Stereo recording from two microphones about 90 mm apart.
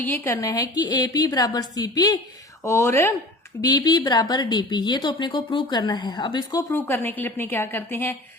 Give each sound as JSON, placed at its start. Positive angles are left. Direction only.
{"t": 0.0, "sound": "a woman's voice", "side_deg": 20}
{"t": 0.4, "sound": "speech", "side_deg": 45}
{"t": 2.6, "sound": "speech", "side_deg": 30}
{"t": 3.6, "sound": "speech", "side_deg": 50}
{"t": 6.5, "sound": "speech", "side_deg": 40}
{"t": 6.7, "sound": "a woman's voice", "side_deg": 25}